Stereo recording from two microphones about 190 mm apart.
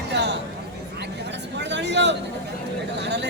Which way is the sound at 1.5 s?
65° right (ahead or behind).